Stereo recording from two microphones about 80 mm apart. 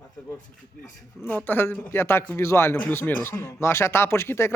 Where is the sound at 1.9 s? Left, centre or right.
Left.